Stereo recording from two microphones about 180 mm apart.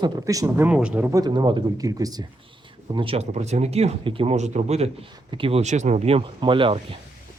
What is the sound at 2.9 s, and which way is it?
Speech, 30° right (ahead or behind).